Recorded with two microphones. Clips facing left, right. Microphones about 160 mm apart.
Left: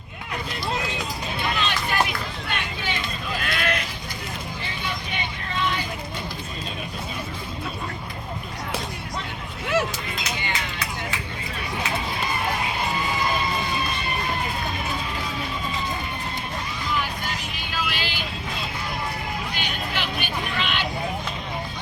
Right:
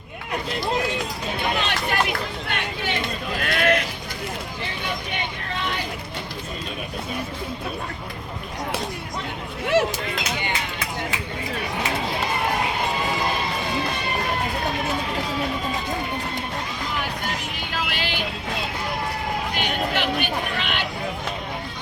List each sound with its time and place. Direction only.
1.5 s vehicle: 60° right (ahead or behind)
17.7 s music: 60° right (ahead or behind)
19.5 s a sound: 55° right (ahead or behind)